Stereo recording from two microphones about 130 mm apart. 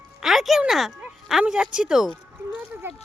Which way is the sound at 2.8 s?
15° right (ahead or behind).